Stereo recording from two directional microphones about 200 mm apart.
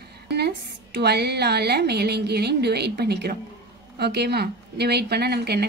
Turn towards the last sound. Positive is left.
turn(degrees=-55)  # may be behind; listen again after turning